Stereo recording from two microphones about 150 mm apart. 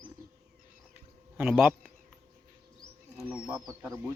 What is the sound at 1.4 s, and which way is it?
Speech, 10° right (ahead or behind).